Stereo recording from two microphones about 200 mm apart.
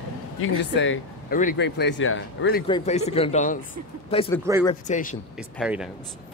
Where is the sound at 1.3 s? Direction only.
45° left (ahead or behind).